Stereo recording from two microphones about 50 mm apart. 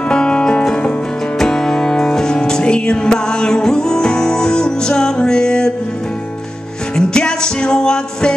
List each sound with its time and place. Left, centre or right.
0.1 s music: centre
7.0 s music: centre